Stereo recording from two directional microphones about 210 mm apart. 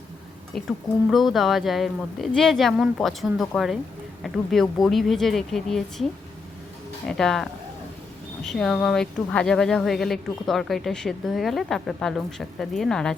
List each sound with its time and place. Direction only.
0.5 s speech: centre (ahead or behind)
7.2 s speech: centre (ahead or behind)